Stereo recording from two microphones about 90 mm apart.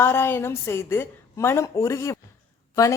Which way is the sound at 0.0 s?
25° left (ahead or behind).